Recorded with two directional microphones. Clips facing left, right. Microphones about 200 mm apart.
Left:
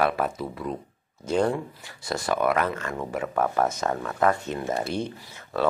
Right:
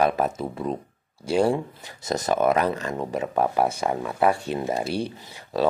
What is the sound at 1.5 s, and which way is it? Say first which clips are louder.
Speech: right 4 dB; 20° right (ahead or behind).